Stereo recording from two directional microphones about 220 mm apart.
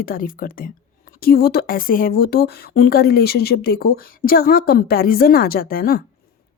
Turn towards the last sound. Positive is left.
turn(degrees=40)  # may be behind; listen again after turning